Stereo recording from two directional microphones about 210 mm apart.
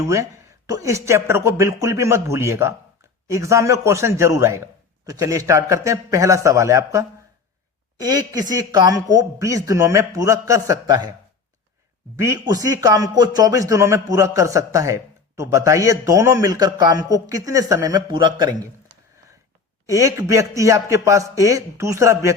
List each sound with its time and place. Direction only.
0.0 s a man's voice: 15° right (ahead or behind)
12.1 s a man's voice: 15° right (ahead or behind)
19.9 s a man's voice: 15° right (ahead or behind)